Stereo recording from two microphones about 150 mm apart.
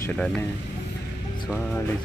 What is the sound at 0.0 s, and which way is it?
Speech, 10° left (ahead or behind).